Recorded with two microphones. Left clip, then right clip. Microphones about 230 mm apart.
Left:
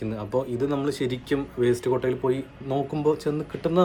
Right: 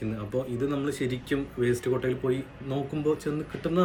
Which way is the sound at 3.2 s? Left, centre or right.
Centre.